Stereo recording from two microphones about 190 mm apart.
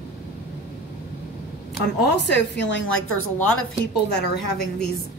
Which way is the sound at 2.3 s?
70° left (ahead or behind).